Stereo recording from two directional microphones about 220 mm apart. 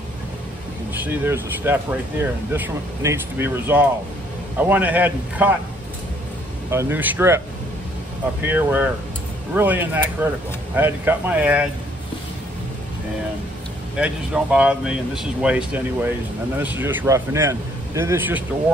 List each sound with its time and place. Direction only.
0.9 s speech: 10° right (ahead or behind)
6.7 s speech: 10° right (ahead or behind)
13.9 s speech: 5° right (ahead or behind)